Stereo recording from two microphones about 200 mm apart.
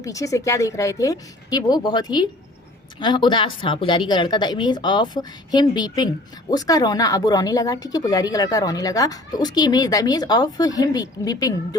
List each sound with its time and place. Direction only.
0.0 s a woman's voice: 15° left (ahead or behind)